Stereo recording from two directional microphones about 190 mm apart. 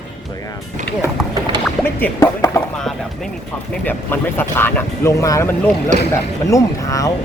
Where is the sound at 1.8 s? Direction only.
10° left (ahead or behind).